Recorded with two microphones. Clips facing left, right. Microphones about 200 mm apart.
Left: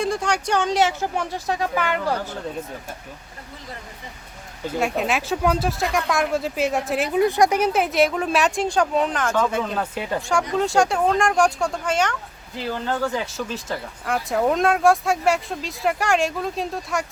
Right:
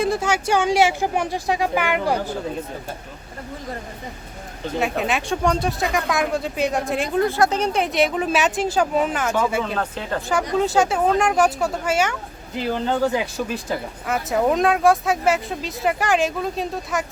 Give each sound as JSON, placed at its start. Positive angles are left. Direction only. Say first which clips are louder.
{"t": 0.0, "sound": "speech", "louder": "right 2 dB", "side_deg": -5}
{"t": 4.8, "sound": "speech", "louder": "even", "side_deg": 0}
{"t": 7.2, "sound": "speech", "louder": "left 2 dB", "side_deg": 15}
{"t": 9.7, "sound": "speech", "louder": "even", "side_deg": 10}
{"t": 10.2, "sound": "speech", "louder": "right 1 dB", "side_deg": 0}
{"t": 12.7, "sound": "speech", "louder": "right 4 dB", "side_deg": -20}
{"t": 14.1, "sound": "speech", "louder": "right 1 dB", "side_deg": 0}